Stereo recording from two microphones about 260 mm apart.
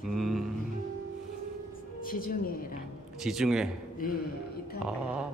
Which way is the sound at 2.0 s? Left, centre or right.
Left.